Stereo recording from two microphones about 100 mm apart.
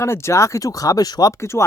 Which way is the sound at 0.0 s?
30° left (ahead or behind).